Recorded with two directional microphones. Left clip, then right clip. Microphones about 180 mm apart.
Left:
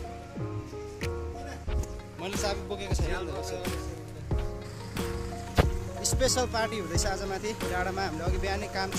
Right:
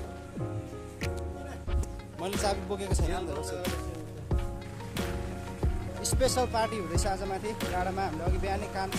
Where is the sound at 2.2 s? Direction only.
20° right (ahead or behind).